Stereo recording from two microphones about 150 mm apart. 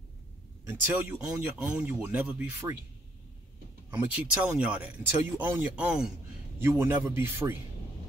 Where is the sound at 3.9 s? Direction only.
10° right (ahead or behind).